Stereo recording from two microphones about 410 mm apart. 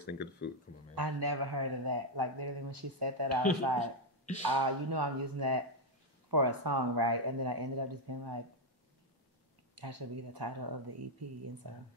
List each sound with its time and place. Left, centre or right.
0.1 s speech: left
0.9 s a man's voice: right
9.8 s a man's voice: right